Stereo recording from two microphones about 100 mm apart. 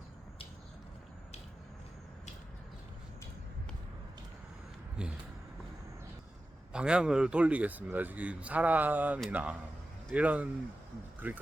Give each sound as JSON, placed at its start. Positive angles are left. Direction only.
{"t": 5.0, "sound": "speech", "side_deg": -10}
{"t": 6.7, "sound": "speech", "side_deg": -10}